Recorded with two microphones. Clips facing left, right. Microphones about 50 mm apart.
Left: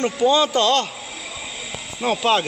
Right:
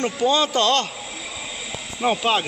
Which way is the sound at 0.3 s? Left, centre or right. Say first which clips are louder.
Left 2 dB; centre.